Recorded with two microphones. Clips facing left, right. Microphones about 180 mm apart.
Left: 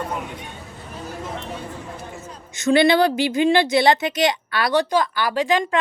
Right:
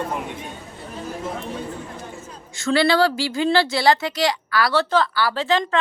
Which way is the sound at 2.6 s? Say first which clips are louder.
Left 2 dB; 20° left (ahead or behind).